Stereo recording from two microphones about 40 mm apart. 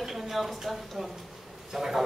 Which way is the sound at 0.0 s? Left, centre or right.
Centre.